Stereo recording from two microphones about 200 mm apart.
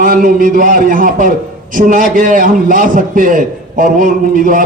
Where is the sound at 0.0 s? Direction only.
40° right (ahead or behind).